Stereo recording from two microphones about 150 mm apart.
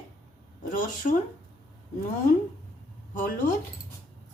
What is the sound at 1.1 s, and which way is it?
Speech, 60° left (ahead or behind).